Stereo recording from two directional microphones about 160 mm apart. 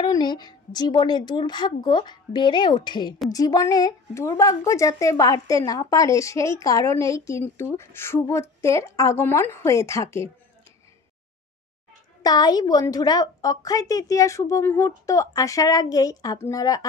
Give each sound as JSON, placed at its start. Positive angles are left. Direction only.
{"t": 0.0, "sound": "a woman's voice", "side_deg": 25}
{"t": 12.2, "sound": "a woman's voice", "side_deg": 25}